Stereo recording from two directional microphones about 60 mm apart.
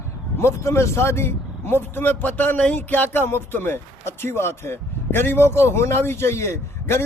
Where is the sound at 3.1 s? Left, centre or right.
Left.